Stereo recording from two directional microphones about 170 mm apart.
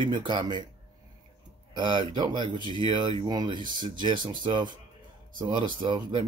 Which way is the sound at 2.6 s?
25° left (ahead or behind).